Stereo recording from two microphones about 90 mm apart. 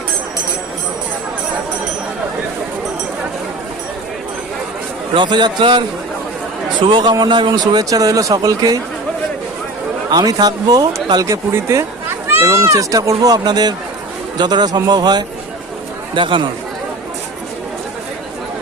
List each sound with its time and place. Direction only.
5.1 s a man's voice: 60° right (ahead or behind); by 8.8 s 40° right (ahead or behind)
10.1 s a man's voice: 50° right (ahead or behind)
16.1 s speech: 65° right (ahead or behind)